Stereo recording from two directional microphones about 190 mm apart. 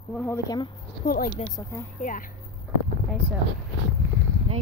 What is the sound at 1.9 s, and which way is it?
Speech, 45° left (ahead or behind).